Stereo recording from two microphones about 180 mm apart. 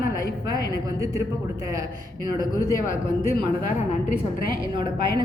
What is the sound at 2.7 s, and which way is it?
Speech, 20° left (ahead or behind).